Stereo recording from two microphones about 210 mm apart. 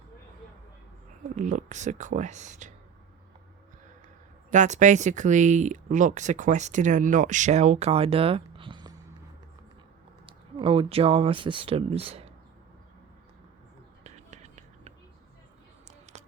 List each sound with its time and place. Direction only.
1.4 s speech: 35° right (ahead or behind)
4.5 s speech: 35° right (ahead or behind)
10.2 s speech: 25° right (ahead or behind)
14.0 s whispering: 35° right (ahead or behind)